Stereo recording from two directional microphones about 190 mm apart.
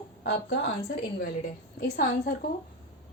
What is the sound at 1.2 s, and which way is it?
A woman's voice, 50° left (ahead or behind).